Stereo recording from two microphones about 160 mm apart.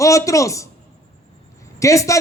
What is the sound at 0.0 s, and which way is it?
Speech, 20° left (ahead or behind).